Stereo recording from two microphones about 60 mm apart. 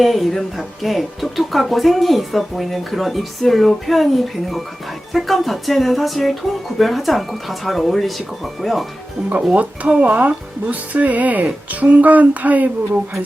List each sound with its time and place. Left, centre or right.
0.0 s speech: centre
9.3 s speech: right